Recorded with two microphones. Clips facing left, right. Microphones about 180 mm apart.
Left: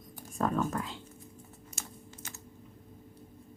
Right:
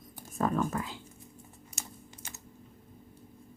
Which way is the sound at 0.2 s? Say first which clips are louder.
Right 1 dB; centre (ahead or behind).